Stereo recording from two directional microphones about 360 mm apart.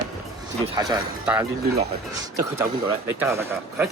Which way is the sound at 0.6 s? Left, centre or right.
Centre.